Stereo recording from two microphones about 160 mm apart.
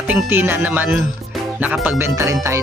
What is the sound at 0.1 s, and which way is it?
Speech, 15° right (ahead or behind).